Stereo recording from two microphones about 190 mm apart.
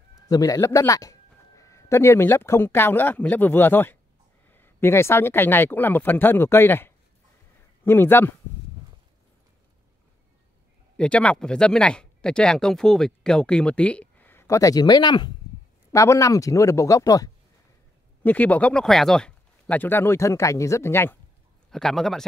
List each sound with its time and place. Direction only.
0.3 s speech: 20° left (ahead or behind)
11.0 s speech: 5° left (ahead or behind)